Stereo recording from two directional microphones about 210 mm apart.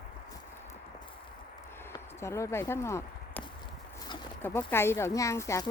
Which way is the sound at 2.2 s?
15° left (ahead or behind).